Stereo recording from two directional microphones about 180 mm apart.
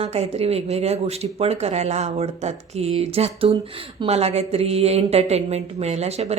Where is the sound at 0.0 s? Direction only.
35° right (ahead or behind).